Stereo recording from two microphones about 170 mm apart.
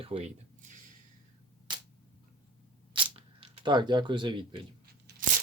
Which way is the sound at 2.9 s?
30° right (ahead or behind).